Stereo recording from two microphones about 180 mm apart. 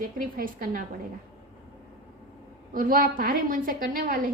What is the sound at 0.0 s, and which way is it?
Speech, 50° right (ahead or behind).